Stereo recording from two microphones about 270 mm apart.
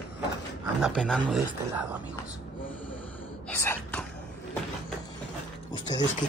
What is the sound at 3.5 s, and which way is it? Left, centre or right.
Gasp, centre.